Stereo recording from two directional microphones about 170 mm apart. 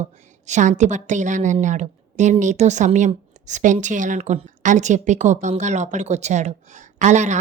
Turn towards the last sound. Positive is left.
turn(degrees=-45)  # may be behind; listen again after turning